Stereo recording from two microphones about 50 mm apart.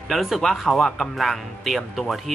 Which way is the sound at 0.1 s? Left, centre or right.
Centre.